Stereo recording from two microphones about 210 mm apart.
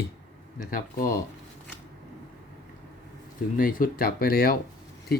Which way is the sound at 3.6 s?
40° left (ahead or behind).